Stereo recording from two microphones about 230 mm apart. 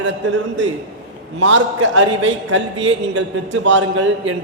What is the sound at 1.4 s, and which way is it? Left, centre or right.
A man's voice, right.